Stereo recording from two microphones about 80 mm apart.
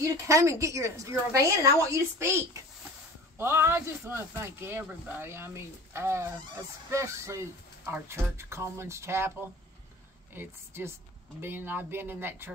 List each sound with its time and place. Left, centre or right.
0.0 s speech: right
10.3 s speech: right